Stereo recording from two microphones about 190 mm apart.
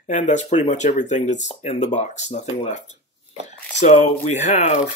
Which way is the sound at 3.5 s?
35° left (ahead or behind).